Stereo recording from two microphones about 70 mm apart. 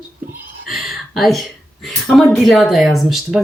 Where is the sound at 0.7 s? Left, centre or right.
Centre.